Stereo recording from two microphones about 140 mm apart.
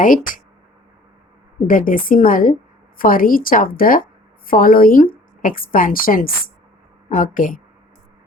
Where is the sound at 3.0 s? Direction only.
90° left.